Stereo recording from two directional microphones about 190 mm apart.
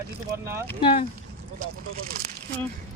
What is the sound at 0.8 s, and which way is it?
Speech, 25° left (ahead or behind).